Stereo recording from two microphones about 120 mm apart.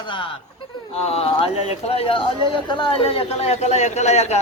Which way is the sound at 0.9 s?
55° left (ahead or behind).